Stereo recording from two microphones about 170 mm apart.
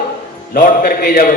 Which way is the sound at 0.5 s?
60° left (ahead or behind).